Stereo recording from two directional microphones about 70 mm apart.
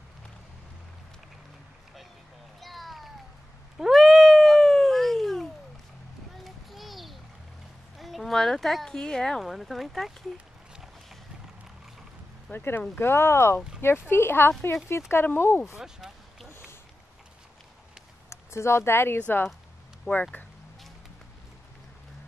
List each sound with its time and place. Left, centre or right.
2.6 s a sound: centre
3.7 s cat: centre
6.3 s a sound: centre
9.4 s speech: centre
12.5 s speech: left
15.8 s speech: centre
16.4 s a sound: left
18.3 s speech: left
19.1 s speech: left
20.1 s speech: left